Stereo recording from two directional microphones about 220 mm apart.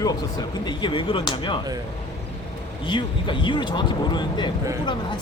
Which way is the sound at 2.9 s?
20° left (ahead or behind).